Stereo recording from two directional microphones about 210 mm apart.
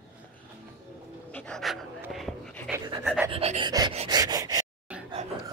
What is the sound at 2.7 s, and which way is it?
Pant, 20° right (ahead or behind).